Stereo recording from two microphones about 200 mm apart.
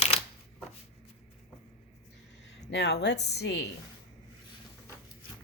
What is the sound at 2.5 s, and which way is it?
A woman's voice, 60° left (ahead or behind).